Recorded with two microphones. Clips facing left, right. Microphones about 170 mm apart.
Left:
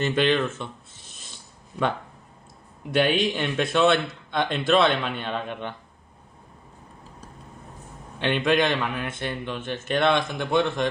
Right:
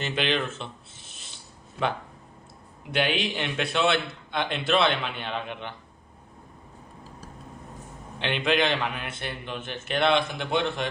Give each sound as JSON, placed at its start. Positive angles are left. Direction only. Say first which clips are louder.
{"t": 0.0, "sound": "a man's voice", "louder": "left 5 dB", "side_deg": 50}
{"t": 2.9, "sound": "a man's voice", "louder": "left 5 dB", "side_deg": 45}
{"t": 8.2, "sound": "a man's voice", "louder": "left 3 dB", "side_deg": 50}